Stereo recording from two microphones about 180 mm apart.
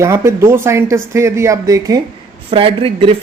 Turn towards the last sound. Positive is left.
turn(degrees=-30)  # may be behind; listen again after turning